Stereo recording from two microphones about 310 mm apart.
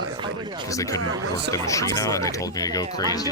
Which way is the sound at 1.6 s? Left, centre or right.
Centre.